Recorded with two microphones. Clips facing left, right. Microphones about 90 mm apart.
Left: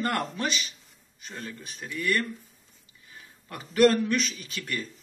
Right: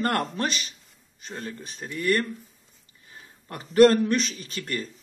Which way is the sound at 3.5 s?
35° right (ahead or behind).